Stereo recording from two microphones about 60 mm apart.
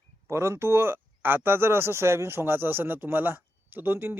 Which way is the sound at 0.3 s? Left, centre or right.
Right.